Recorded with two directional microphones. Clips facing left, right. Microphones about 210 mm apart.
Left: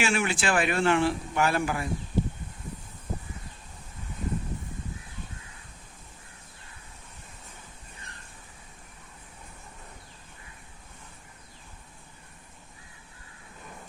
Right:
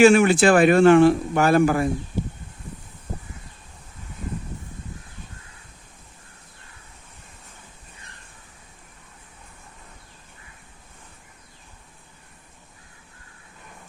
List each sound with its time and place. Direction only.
0.0 s speech: 45° right (ahead or behind)